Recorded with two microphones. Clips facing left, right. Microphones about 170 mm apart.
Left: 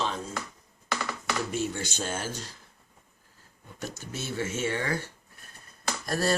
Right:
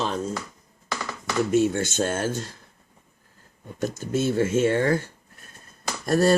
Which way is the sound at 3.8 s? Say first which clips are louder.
Right 12 dB; 50° right (ahead or behind).